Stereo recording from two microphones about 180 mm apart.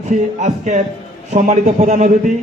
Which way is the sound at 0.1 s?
40° right (ahead or behind).